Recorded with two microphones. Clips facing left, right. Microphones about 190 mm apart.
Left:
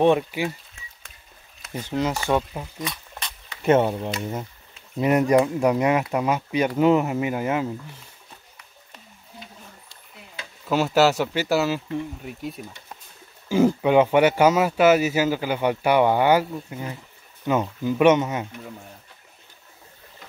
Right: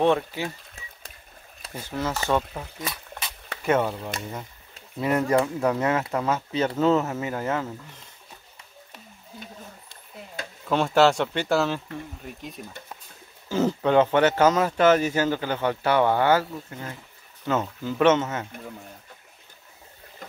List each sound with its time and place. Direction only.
0.0 s speech: 15° left (ahead or behind)
1.9 s speech: 15° left (ahead or behind)
2.8 s a sound: 5° right (ahead or behind)
3.6 s speech: 25° left (ahead or behind)
10.7 s speech: 5° left (ahead or behind)